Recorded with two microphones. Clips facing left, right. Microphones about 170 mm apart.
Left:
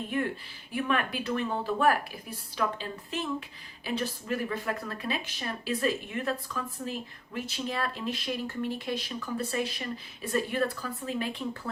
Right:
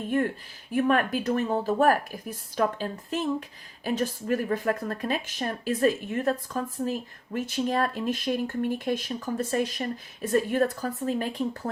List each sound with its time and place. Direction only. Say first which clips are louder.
0.1 s speech: right 5 dB; 45° right (ahead or behind)